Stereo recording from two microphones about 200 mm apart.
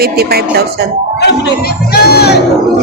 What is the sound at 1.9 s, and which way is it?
Battle cry, 55° left (ahead or behind).